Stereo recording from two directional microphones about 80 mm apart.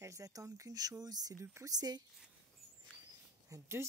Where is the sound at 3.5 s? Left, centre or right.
Right.